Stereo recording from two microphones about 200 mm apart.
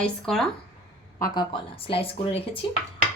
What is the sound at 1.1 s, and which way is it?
Speech, 15° left (ahead or behind).